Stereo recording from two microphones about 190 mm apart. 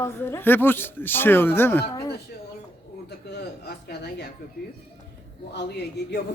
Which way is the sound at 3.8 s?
60° left (ahead or behind).